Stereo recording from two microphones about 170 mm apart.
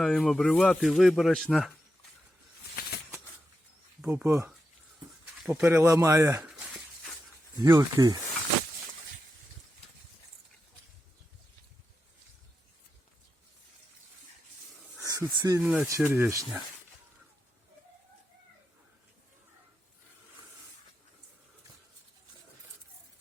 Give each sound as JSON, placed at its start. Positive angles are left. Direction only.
{"t": 0.0, "sound": "speech", "side_deg": 0}
{"t": 4.0, "sound": "speech", "side_deg": -10}
{"t": 7.6, "sound": "speech", "side_deg": -20}
{"t": 14.9, "sound": "speech", "side_deg": -15}
{"t": 15.6, "sound": "speech", "side_deg": -5}